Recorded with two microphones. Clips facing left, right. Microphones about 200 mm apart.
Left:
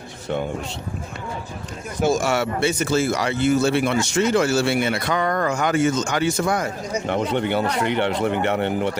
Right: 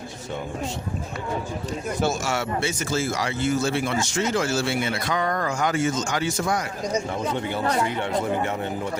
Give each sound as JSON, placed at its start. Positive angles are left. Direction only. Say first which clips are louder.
{"t": 2.2, "sound": "a man's voice", "louder": "left 5 dB", "side_deg": 60}